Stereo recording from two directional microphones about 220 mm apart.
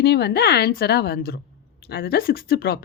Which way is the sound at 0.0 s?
50° left (ahead or behind).